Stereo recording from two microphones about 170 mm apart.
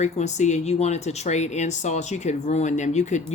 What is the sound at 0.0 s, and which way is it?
Speech, 45° left (ahead or behind).